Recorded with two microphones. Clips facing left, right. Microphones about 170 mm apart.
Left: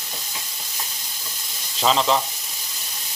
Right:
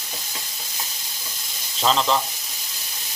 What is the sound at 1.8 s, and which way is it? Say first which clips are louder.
Frying: left 1 dB; centre (ahead or behind).